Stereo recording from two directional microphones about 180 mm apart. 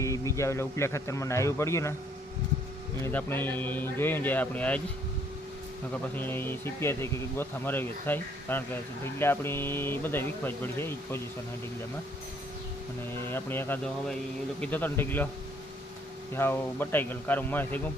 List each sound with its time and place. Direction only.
0.0 s speech: 15° left (ahead or behind)
3.0 s speech: 10° left (ahead or behind)
5.9 s speech: 10° left (ahead or behind)
13.2 s speech: 10° left (ahead or behind)
16.3 s speech: 10° left (ahead or behind)